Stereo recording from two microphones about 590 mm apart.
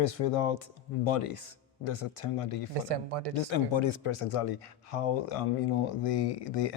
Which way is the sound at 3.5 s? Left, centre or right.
Left.